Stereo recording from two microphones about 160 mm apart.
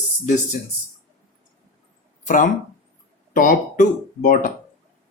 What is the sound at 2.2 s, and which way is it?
Speech, 55° left (ahead or behind).